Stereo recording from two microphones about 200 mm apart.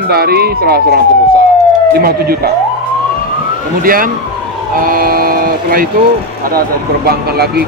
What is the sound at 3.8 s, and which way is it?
Speech, 45° right (ahead or behind).